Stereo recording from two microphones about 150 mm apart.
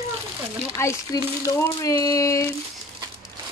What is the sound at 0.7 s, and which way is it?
Speech, 20° left (ahead or behind).